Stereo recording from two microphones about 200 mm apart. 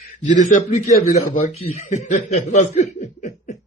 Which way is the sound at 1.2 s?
90° left.